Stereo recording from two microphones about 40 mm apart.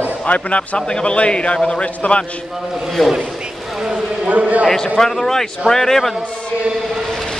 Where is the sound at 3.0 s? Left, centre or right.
Centre.